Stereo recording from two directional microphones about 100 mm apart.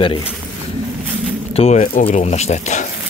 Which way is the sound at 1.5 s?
80° left.